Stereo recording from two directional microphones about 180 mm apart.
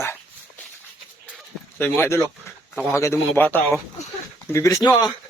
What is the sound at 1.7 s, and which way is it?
Speech, 10° left (ahead or behind).